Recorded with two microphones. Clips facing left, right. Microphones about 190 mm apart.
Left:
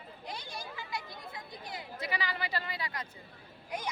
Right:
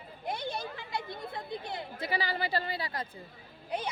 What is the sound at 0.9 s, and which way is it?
Chatter, 25° right (ahead or behind).